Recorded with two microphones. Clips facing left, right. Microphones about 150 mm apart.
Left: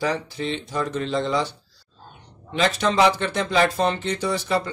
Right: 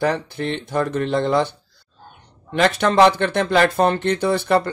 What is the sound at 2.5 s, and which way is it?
Speech, 60° right (ahead or behind).